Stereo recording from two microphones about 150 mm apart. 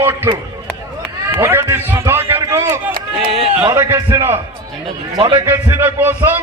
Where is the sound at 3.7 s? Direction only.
20° right (ahead or behind).